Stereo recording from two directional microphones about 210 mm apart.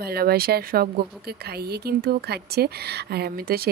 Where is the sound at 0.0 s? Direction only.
45° right (ahead or behind).